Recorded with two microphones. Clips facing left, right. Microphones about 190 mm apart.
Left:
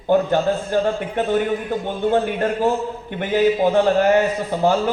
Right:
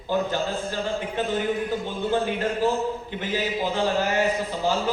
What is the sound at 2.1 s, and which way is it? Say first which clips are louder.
A man's voice: left 3 dB; 60° left (ahead or behind).